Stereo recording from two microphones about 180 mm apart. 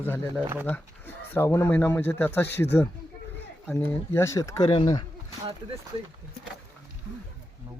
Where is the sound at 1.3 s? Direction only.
10° left (ahead or behind).